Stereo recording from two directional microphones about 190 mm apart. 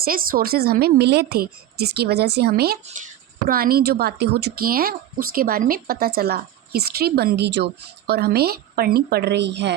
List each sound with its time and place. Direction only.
0.0 s a woman's voice: 50° right (ahead or behind); by 9.7 s 65° right (ahead or behind)